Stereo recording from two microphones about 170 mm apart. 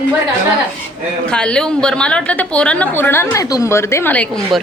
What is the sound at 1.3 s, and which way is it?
A woman's voice, 5° left (ahead or behind).